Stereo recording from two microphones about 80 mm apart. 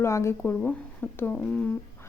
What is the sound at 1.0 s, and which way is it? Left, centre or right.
Speech, left.